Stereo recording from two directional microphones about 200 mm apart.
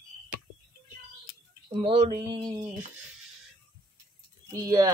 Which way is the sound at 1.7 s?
25° right (ahead or behind).